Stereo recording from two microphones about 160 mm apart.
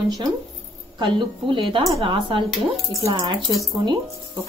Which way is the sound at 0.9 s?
30° right (ahead or behind).